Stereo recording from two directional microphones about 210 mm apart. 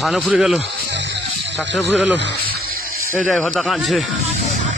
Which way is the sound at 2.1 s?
55° right (ahead or behind).